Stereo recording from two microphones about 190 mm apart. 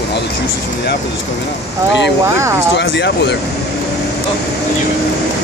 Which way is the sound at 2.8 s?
65° left (ahead or behind).